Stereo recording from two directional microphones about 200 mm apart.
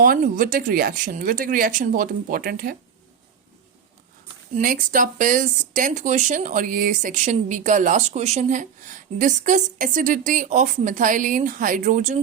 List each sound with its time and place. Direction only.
0.0 s speech: 45° right (ahead or behind)
4.5 s speech: 45° right (ahead or behind)